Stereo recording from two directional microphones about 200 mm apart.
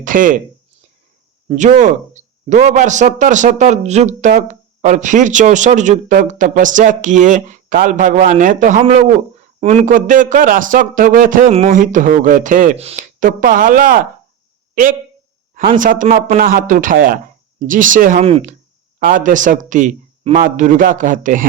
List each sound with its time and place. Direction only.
0.0 s speech: 40° right (ahead or behind)
1.5 s speech: 40° right (ahead or behind)
15.5 s a man's voice: 40° right (ahead or behind)
18.9 s a man's voice: 45° right (ahead or behind)